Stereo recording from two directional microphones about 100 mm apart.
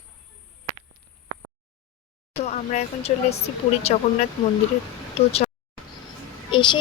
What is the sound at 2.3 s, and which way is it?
Speech, 90° left.